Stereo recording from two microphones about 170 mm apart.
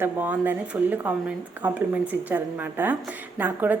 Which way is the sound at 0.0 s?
10° right (ahead or behind).